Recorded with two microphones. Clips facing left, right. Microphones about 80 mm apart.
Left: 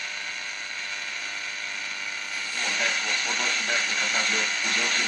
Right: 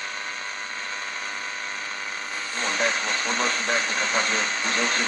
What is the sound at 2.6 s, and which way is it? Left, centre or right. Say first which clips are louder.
Speech: right 4 dB; right.